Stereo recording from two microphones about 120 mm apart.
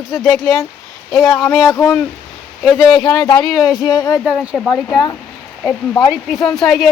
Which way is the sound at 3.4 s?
Centre (ahead or behind).